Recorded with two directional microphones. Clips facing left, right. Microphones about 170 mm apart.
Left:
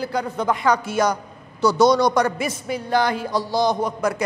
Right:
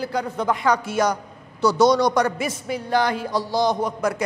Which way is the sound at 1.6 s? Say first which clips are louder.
Left 1 dB; 30° left (ahead or behind).